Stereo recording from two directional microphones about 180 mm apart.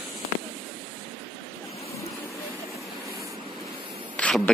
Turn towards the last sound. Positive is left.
turn(degrees=5)  # may be behind; listen again after turning